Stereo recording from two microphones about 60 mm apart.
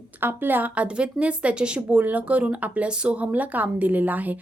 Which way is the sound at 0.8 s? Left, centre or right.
Centre.